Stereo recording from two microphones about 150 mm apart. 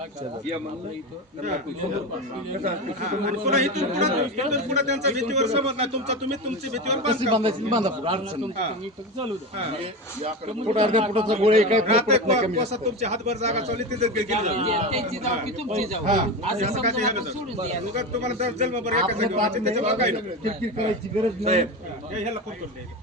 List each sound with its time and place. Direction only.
2.6 s a man's voice: 55° right (ahead or behind); by 7.9 s 35° right (ahead or behind)
9.1 s a man's voice: 35° right (ahead or behind)